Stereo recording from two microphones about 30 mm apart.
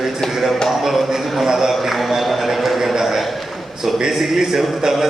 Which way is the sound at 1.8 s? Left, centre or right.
Centre.